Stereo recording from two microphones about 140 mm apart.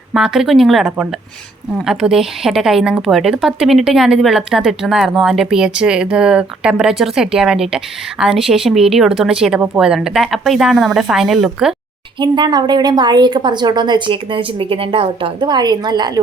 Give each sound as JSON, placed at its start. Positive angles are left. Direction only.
{"t": 0.1, "sound": "speech", "side_deg": 0}
{"t": 12.2, "sound": "a woman's voice", "side_deg": -30}